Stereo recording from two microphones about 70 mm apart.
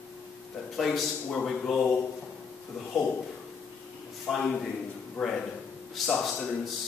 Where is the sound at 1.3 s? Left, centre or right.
Centre.